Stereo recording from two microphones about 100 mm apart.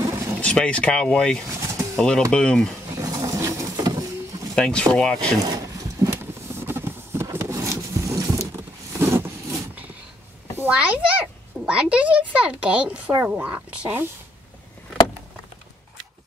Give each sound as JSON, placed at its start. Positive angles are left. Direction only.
{"t": 0.4, "sound": "speech", "side_deg": 10}
{"t": 1.5, "sound": "pigeon", "side_deg": -30}
{"t": 2.0, "sound": "speech", "side_deg": 10}
{"t": 2.9, "sound": "a sound", "side_deg": -35}
{"t": 4.6, "sound": "speech", "side_deg": 10}
{"t": 6.0, "sound": "clip-clop", "side_deg": -35}
{"t": 6.6, "sound": "a sound", "side_deg": -25}
{"t": 7.3, "sound": "zipper", "side_deg": -30}
{"t": 10.6, "sound": "a child's voice", "side_deg": -15}